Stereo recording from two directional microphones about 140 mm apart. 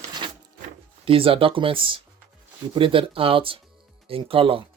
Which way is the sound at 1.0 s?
40° right (ahead or behind).